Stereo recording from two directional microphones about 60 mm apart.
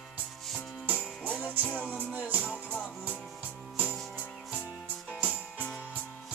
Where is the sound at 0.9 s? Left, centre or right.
Left.